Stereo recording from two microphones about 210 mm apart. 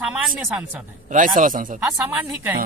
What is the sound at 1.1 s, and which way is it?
Speech, 40° right (ahead or behind).